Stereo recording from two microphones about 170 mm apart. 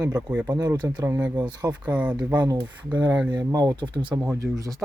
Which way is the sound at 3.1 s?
25° right (ahead or behind).